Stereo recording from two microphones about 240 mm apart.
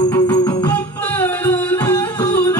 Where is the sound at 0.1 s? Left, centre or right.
Centre.